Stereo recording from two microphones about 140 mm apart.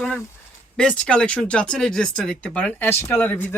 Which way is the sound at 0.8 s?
5° left (ahead or behind).